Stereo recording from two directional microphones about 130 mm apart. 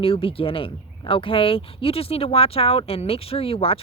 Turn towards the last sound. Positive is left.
turn(degrees=45)  # may be behind; listen again after turning